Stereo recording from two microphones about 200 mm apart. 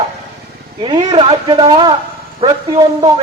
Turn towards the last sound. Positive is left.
turn(degrees=-20)  # may be behind; listen again after turning